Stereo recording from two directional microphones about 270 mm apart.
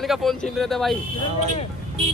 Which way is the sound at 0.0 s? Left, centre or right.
Centre.